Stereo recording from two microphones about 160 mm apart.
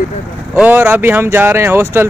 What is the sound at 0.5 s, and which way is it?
Speech, 10° right (ahead or behind).